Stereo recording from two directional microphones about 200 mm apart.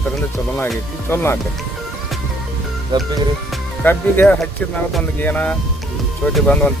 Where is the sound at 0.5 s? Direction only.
10° left (ahead or behind).